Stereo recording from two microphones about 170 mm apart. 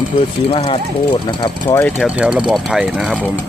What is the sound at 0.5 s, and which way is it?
Speech, 30° left (ahead or behind).